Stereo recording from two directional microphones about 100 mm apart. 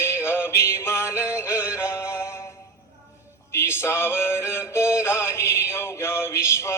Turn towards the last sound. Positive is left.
turn(degrees=25)  # may be behind; listen again after turning